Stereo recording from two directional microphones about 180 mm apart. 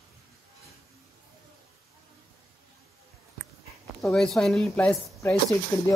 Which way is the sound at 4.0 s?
Centre (ahead or behind).